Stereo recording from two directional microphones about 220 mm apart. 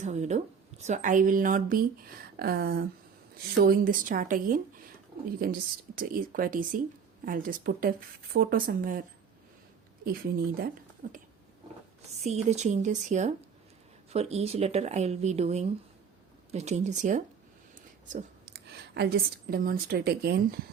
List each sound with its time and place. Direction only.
0.0 s speech: 30° right (ahead or behind)
11.0 s speech: 40° right (ahead or behind)
12.2 s speech: 30° right (ahead or behind)
18.4 s a woman's voice: 50° right (ahead or behind)